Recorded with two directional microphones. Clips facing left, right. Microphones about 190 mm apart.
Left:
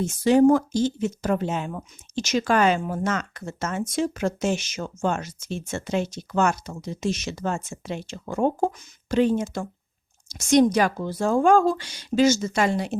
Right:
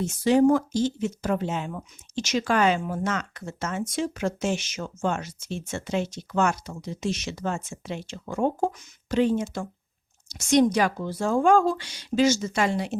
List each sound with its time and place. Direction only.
0.0 s speech: 45° left (ahead or behind)